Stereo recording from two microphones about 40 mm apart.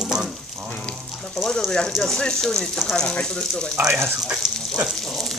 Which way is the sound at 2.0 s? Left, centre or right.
Centre.